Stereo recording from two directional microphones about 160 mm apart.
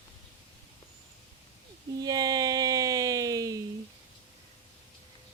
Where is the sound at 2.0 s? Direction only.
25° right (ahead or behind).